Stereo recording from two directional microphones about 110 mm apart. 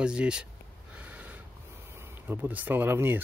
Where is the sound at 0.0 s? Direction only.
10° right (ahead or behind).